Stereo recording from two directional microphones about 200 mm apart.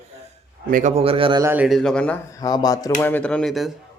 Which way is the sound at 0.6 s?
40° right (ahead or behind).